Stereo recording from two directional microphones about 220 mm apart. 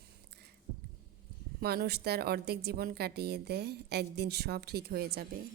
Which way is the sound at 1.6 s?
45° right (ahead or behind).